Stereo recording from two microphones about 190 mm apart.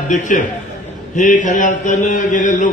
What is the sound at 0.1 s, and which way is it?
A man's voice, 40° left (ahead or behind).